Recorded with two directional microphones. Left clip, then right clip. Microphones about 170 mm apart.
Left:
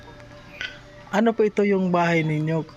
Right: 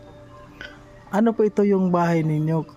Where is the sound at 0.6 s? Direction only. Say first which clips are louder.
Left 6 dB; 35° right (ahead or behind).